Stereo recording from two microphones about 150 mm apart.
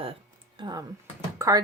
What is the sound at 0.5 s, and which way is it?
Speech, 25° right (ahead or behind).